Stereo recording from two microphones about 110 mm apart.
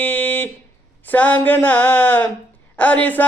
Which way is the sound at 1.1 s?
15° left (ahead or behind).